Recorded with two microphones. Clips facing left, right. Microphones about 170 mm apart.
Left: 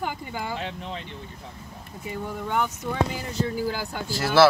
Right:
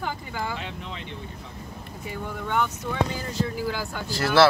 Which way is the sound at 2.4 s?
10° left (ahead or behind).